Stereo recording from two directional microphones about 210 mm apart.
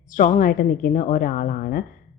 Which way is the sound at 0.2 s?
40° left (ahead or behind).